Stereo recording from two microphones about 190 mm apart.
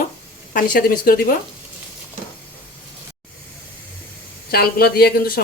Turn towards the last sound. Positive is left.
turn(degrees=55)  # may be behind; listen again after turning